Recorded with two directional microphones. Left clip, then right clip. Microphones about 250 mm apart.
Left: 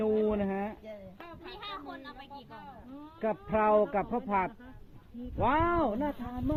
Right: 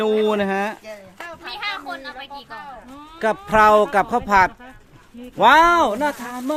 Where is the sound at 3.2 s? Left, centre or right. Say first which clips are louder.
Right 14 dB; right; by 6.4 s centre.